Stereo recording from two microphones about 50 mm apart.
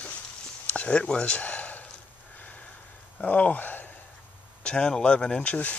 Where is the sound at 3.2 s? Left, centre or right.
Left.